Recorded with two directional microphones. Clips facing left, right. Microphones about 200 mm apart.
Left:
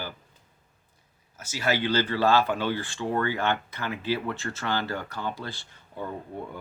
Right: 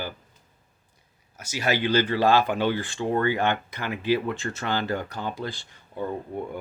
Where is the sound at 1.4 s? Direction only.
15° right (ahead or behind).